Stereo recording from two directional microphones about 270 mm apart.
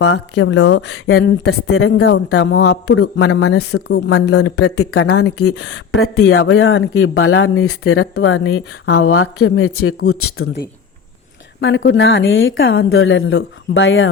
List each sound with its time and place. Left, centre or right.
0.0 s speech: left
2.0 s speech: left
5.5 s speech: left